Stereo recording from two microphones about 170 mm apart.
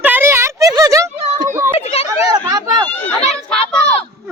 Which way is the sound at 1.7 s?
35° left (ahead or behind).